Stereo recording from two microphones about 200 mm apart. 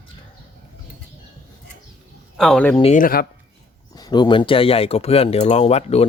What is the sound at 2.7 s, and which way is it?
Speech, 30° left (ahead or behind).